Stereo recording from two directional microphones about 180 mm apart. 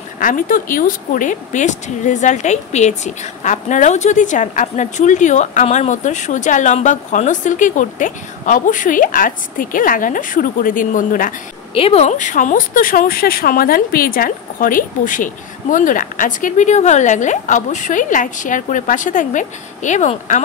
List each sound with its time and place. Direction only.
0.2 s speech: 50° left (ahead or behind)
11.7 s speech: 35° left (ahead or behind)